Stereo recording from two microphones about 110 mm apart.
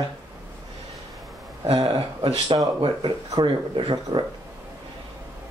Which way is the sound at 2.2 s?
40° right (ahead or behind).